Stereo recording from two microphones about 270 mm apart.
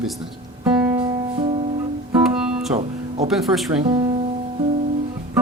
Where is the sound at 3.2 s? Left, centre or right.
Centre.